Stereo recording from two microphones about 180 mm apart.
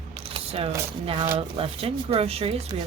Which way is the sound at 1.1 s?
30° right (ahead or behind).